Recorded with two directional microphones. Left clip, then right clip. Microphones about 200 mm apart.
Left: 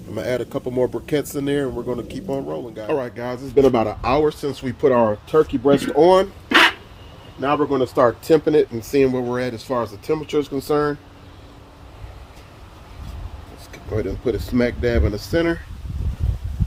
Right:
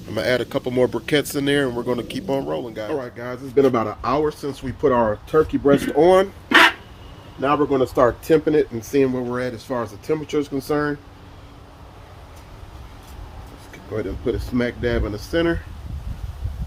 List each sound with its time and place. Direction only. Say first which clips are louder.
0.1 s speech: right 3 dB; 5° left (ahead or behind)
2.9 s speech: left 7 dB; 45° left (ahead or behind)
5.3 s speech: even; 15° left (ahead or behind)
8.3 s speech: left 1 dB; 25° left (ahead or behind)
8.9 s speech: left 2 dB; 40° left (ahead or behind)
13.9 s speech: left 2 dB; 30° left (ahead or behind)